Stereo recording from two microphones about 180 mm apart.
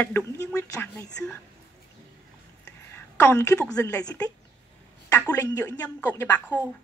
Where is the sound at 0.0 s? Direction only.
15° left (ahead or behind).